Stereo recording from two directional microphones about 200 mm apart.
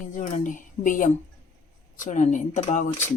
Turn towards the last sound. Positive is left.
turn(degrees=35)  # may be behind; listen again after turning